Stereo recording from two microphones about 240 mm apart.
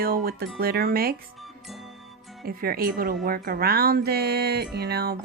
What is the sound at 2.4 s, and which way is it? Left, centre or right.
A woman's voice, right.